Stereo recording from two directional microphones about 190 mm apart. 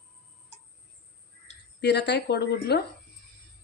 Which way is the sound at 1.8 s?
60° left (ahead or behind).